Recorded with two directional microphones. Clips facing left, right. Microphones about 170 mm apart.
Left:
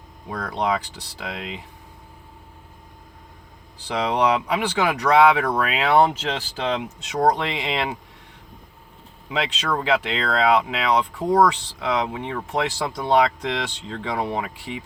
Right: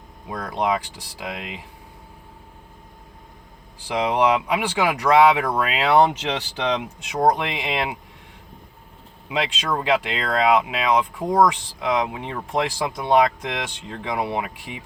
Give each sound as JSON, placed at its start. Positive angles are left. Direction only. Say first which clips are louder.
{"t": 0.3, "sound": "speech", "louder": "right 1 dB", "side_deg": -10}
{"t": 3.8, "sound": "speech", "louder": "right 1 dB", "side_deg": -10}
{"t": 9.6, "sound": "speech", "louder": "even", "side_deg": -10}